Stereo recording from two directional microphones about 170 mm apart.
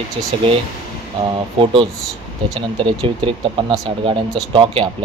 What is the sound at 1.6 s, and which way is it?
Speech, 30° right (ahead or behind).